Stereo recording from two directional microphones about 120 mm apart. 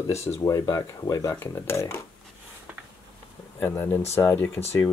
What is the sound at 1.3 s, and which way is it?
Speech, 20° left (ahead or behind).